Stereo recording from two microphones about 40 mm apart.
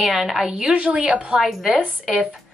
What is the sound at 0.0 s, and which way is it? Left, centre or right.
A woman's voice, centre.